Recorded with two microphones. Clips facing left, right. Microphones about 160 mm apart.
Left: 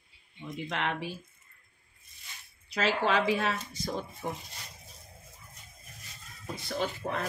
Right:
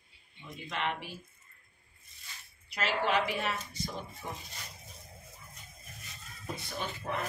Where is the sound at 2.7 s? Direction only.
90° left.